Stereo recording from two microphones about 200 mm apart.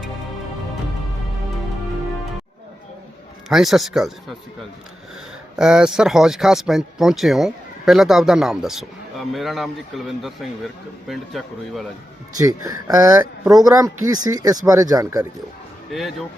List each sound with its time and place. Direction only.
3.5 s speech: centre (ahead or behind)
5.5 s speech: 5° right (ahead or behind)
12.4 s a man's voice: 20° right (ahead or behind)
15.9 s speech: centre (ahead or behind)